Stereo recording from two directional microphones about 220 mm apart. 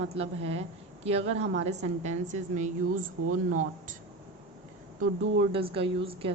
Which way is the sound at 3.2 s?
75° right (ahead or behind).